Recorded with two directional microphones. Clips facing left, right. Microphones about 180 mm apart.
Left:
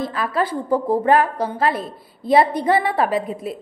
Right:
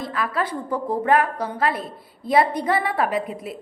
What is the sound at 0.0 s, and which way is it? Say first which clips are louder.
A woman's voice: left 3 dB; 30° left (ahead or behind).